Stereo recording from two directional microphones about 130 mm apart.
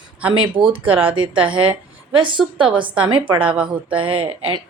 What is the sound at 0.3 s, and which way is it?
Speech, 40° right (ahead or behind).